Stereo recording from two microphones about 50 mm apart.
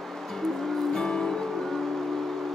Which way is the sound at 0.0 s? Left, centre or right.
Centre.